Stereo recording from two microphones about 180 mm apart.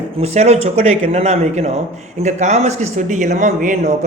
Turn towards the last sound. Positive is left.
turn(degrees=-45)  # may be behind; listen again after turning